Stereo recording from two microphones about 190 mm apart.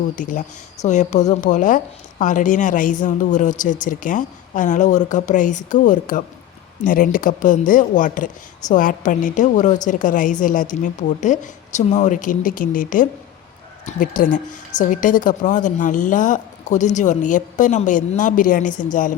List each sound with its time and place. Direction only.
0.2 s speech: 40° left (ahead or behind)